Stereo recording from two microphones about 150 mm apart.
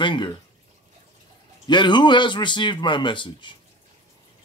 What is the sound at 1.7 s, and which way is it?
Speech, 30° left (ahead or behind).